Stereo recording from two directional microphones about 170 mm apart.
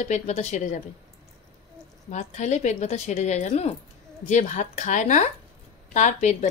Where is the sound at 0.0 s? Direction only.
40° left (ahead or behind).